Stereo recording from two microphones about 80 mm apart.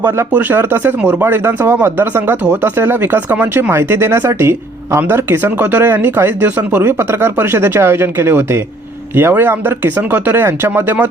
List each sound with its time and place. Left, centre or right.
0.0 s speech: right